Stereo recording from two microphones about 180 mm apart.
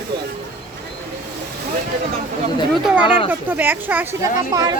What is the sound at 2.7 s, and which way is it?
Speech, 5° right (ahead or behind).